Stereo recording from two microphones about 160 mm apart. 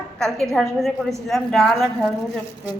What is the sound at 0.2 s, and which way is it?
A woman's voice, 5° left (ahead or behind).